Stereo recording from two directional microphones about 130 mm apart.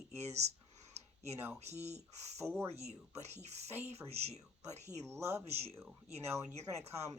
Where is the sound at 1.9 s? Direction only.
55° right (ahead or behind).